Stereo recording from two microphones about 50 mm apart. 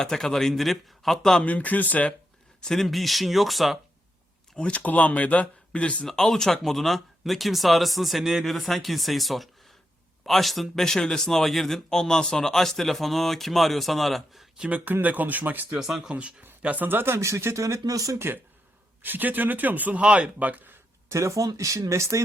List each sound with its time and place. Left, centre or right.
0.0 s a man's voice: centre
1.4 s speech: left
2.6 s speech: centre
4.5 s speech: left
6.1 s speech: centre
8.4 s speech: centre
15.0 s speech: right
16.0 s speech: right
16.6 s speech: right
17.2 s speech: right
18.3 s speech: right
19.0 s speech: right
21.1 s speech: right